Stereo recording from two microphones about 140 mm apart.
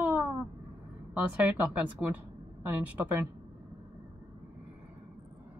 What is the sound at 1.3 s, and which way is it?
A woman's voice, 10° right (ahead or behind).